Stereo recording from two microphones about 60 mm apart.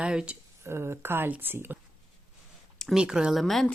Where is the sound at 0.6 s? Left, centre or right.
Right.